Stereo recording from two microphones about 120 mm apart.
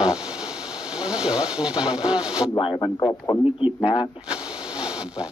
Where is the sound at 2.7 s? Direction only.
25° left (ahead or behind).